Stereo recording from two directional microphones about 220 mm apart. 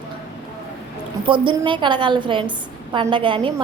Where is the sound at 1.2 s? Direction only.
20° right (ahead or behind).